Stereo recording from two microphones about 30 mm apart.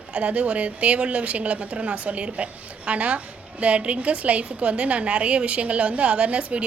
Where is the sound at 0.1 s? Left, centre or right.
Right.